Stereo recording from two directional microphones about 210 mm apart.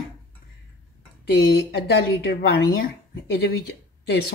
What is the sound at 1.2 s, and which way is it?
A woman's voice, 50° left (ahead or behind).